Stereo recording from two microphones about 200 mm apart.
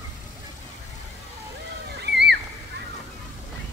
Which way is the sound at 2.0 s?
55° right (ahead or behind).